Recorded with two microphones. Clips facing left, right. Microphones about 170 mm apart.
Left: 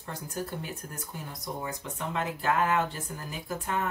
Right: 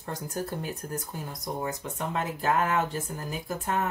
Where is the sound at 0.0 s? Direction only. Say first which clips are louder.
Right 3 dB; 40° right (ahead or behind).